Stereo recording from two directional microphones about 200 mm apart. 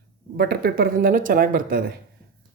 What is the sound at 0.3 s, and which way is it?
Speech, 50° right (ahead or behind).